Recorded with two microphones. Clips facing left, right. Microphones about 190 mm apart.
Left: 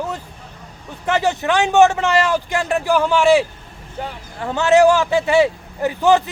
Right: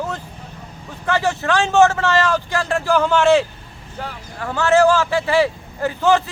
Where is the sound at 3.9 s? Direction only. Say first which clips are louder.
Left 2 dB; 20° left (ahead or behind).